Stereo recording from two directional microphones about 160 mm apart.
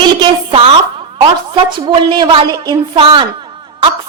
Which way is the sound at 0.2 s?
35° right (ahead or behind).